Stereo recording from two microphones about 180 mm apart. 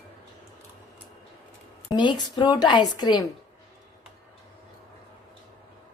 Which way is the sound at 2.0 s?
25° left (ahead or behind).